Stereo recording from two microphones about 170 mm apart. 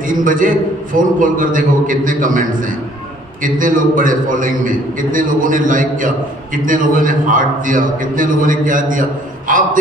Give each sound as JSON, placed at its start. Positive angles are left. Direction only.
{"t": 0.0, "sound": "a man's voice", "side_deg": -50}